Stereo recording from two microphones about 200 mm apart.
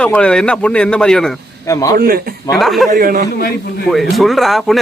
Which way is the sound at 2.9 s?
45° right (ahead or behind).